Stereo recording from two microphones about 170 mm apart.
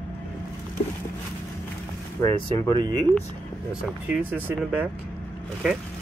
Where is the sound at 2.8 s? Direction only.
25° right (ahead or behind).